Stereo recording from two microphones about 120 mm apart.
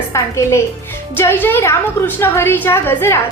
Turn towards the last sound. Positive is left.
turn(degrees=20)  # may be behind; listen again after turning